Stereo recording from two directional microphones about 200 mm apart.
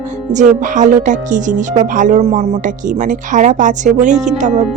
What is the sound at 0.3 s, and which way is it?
Speech, 40° right (ahead or behind).